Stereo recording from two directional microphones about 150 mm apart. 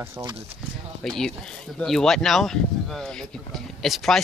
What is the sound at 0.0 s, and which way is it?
Speech, 20° right (ahead or behind).